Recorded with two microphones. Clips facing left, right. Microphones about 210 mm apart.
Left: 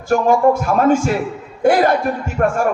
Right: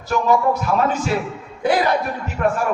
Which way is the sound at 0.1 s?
50° left (ahead or behind).